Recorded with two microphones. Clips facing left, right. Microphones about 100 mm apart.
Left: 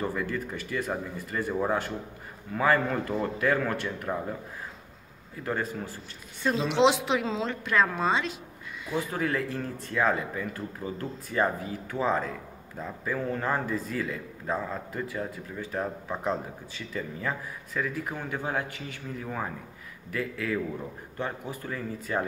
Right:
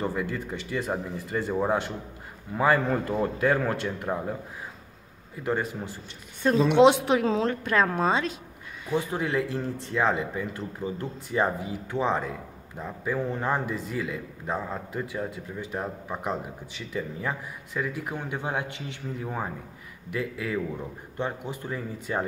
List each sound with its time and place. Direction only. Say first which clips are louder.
0.0 s speech: right 1 dB; 20° right (ahead or behind)
5.4 s speech: right 3 dB; 20° right (ahead or behind)
6.4 s a woman's voice: right 5 dB; 50° right (ahead or behind)
8.9 s a man's voice: right 2 dB; 20° right (ahead or behind)